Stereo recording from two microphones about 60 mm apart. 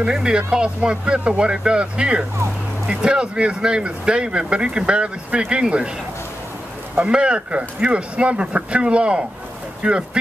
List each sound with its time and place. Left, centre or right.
0.0 s speech: centre
7.0 s speech: centre